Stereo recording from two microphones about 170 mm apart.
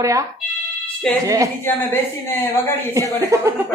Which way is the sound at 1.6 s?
10° left (ahead or behind).